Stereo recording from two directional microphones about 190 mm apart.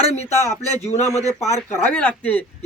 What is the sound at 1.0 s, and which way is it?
Speech, 35° left (ahead or behind).